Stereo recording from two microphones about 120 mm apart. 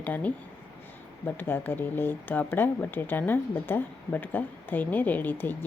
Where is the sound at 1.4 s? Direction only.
15° left (ahead or behind).